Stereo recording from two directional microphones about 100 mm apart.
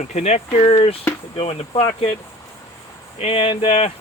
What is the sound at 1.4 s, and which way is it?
Speech, 75° left (ahead or behind).